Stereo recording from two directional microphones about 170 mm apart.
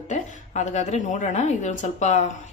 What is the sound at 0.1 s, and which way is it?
A woman's voice, 45° left (ahead or behind).